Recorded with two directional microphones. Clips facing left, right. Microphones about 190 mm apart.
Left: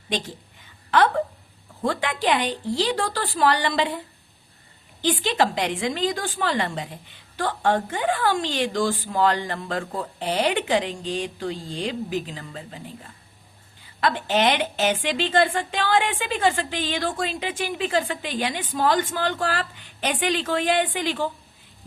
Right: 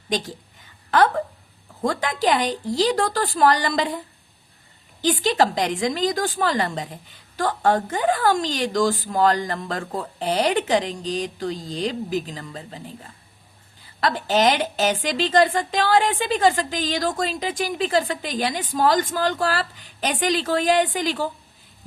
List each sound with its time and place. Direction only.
0.9 s a woman's voice: 40° right (ahead or behind)
5.0 s a woman's voice: 40° right (ahead or behind)
14.0 s a woman's voice: 40° right (ahead or behind)